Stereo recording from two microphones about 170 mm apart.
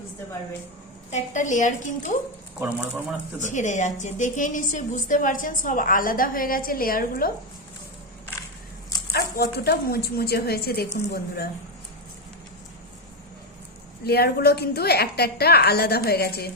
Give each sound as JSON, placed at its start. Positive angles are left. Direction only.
{"t": 1.1, "sound": "a woman's voice", "side_deg": 45}
{"t": 2.6, "sound": "speech", "side_deg": -5}
{"t": 3.4, "sound": "a woman's voice", "side_deg": 45}
{"t": 9.1, "sound": "a woman's voice", "side_deg": 70}
{"t": 14.0, "sound": "a woman's voice", "side_deg": 70}